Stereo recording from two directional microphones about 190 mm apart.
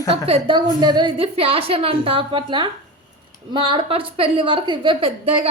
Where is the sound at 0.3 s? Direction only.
30° right (ahead or behind).